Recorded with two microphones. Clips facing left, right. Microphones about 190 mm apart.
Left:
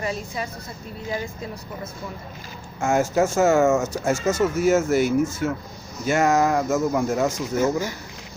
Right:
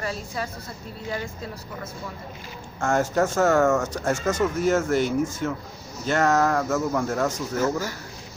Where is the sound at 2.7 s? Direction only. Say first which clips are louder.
Left 2 dB; 10° left (ahead or behind).